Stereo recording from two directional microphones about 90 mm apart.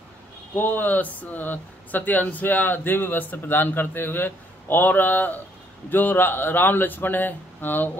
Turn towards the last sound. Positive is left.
turn(degrees=20)  # may be behind; listen again after turning